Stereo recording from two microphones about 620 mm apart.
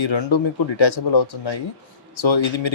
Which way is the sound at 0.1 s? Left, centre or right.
Left.